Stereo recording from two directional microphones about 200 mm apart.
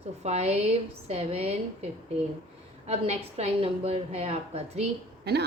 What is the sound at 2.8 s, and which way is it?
A woman's voice, 30° right (ahead or behind).